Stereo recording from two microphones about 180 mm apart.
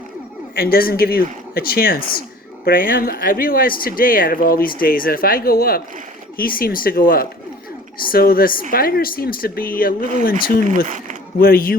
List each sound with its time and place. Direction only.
0.5 s speech: 55° left (ahead or behind)
10.8 s speech: 45° right (ahead or behind)
11.3 s speech: 55° left (ahead or behind)